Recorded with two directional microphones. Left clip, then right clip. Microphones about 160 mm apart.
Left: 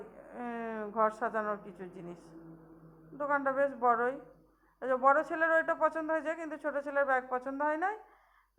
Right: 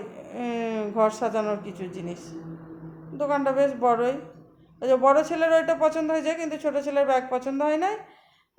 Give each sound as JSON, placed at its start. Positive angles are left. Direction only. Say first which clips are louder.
{"t": 0.3, "sound": "a sound", "louder": "right 10 dB", "side_deg": 5}
{"t": 1.7, "sound": "a woman's voice", "louder": "right 11 dB", "side_deg": 10}
{"t": 3.2, "sound": "a woman's voice", "louder": "right 8 dB", "side_deg": 5}
{"t": 5.2, "sound": "a woman's voice", "louder": "right 8 dB", "side_deg": 5}